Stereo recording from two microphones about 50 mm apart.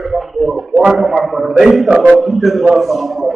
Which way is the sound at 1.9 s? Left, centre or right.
Right.